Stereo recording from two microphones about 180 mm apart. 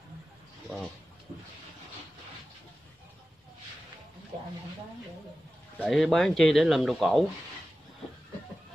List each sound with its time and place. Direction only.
5.8 s speech: centre (ahead or behind)